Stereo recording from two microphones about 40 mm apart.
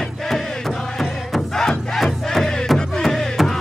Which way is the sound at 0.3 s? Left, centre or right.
Centre.